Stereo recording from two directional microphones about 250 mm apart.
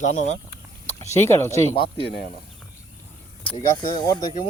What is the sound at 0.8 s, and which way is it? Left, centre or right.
Speech, centre.